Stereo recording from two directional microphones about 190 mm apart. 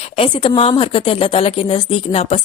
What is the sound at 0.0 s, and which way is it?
A woman's voice, 30° left (ahead or behind).